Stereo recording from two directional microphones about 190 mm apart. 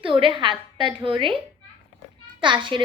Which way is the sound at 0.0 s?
25° right (ahead or behind).